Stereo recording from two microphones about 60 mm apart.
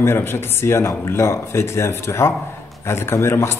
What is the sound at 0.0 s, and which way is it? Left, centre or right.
Speech, left.